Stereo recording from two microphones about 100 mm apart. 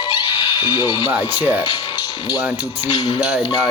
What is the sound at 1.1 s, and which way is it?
Speech, 15° right (ahead or behind).